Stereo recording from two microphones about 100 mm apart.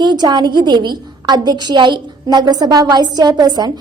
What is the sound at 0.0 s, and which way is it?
A woman's voice, 45° right (ahead or behind).